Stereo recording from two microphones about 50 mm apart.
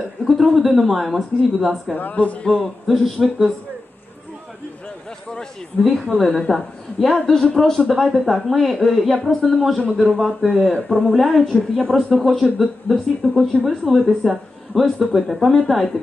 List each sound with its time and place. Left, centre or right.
0.2 s speech: centre
2.0 s speech: left
2.6 s speech: centre
5.9 s a man's voice: centre